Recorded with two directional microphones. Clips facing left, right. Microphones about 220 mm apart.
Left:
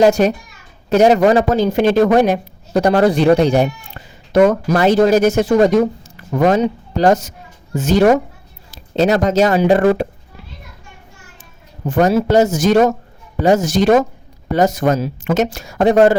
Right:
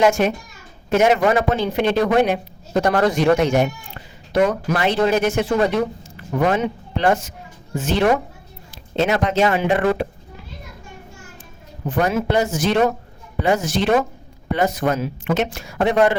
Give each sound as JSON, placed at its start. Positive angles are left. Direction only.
{"t": 0.0, "sound": "speech", "side_deg": 35}
{"t": 4.3, "sound": "speech", "side_deg": 45}
{"t": 11.9, "sound": "speech", "side_deg": 40}